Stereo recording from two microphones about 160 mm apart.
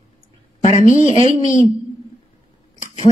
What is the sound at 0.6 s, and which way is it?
Speech, 50° left (ahead or behind).